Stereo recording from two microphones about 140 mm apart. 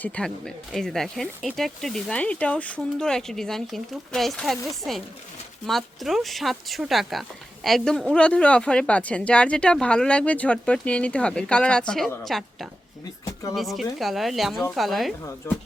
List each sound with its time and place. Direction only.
0.0 s speech: 5° left (ahead or behind)
15.4 s speech: 20° left (ahead or behind)